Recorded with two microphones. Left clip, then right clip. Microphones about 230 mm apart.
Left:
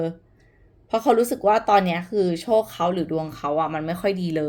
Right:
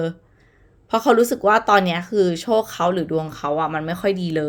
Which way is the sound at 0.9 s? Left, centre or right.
Right.